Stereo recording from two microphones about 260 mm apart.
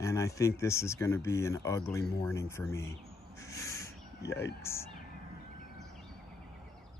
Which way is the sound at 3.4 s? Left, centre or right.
Centre.